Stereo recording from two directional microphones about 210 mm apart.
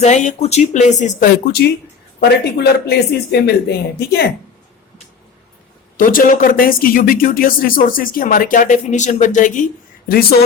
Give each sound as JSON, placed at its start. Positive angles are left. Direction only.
{"t": 0.0, "sound": "speech", "side_deg": 35}
{"t": 6.0, "sound": "speech", "side_deg": 40}